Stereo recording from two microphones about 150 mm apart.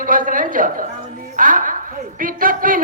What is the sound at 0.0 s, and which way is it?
A woman's voice, 65° right (ahead or behind).